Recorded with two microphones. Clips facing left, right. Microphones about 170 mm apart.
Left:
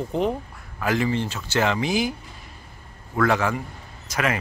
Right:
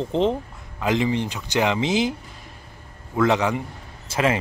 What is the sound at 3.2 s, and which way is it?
A man's voice, 20° right (ahead or behind).